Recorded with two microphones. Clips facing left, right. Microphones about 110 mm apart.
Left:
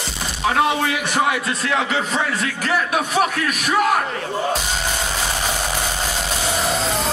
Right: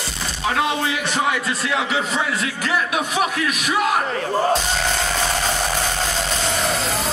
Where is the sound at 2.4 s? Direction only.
45° left (ahead or behind).